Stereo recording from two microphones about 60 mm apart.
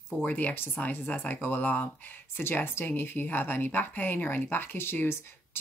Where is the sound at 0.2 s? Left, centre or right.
Left.